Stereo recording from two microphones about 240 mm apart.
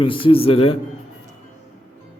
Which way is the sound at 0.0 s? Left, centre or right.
Left.